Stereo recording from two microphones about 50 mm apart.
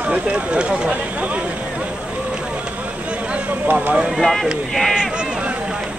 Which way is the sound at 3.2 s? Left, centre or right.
Right.